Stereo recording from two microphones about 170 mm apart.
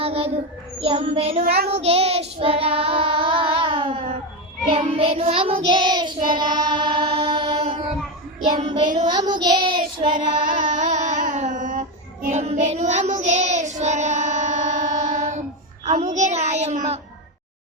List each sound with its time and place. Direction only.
0.0 s child singing: 35° right (ahead or behind)
6.7 s mantra: 25° right (ahead or behind)
7.6 s child singing: 40° right (ahead or behind)
8.5 s child singing: 25° right (ahead or behind)
10.4 s child singing: 50° right (ahead or behind)